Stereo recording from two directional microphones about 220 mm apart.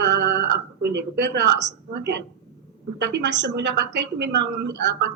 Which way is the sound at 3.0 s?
50° right (ahead or behind).